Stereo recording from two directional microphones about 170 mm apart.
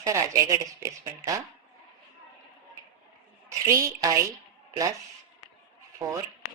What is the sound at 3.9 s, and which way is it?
Speech, 20° right (ahead or behind).